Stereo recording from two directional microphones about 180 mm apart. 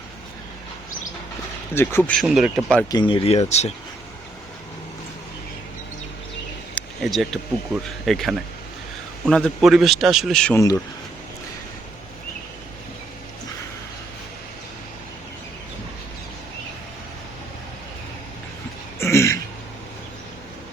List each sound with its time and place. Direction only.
1.7 s speech: 10° left (ahead or behind)
2.2 s speech: 5° right (ahead or behind)
2.9 s speech: 25° left (ahead or behind)
6.7 s speech: centre (ahead or behind)
18.9 s throat clearing: 15° left (ahead or behind)